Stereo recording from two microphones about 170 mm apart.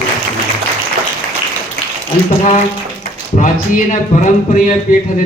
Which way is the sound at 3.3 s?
45° left (ahead or behind).